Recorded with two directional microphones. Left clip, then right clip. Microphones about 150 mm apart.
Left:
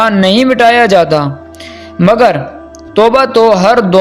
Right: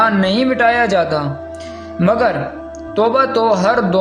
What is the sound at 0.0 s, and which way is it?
A man's voice, 50° left (ahead or behind).